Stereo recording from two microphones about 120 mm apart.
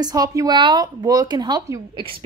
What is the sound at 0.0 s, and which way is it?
A woman's voice, 30° right (ahead or behind).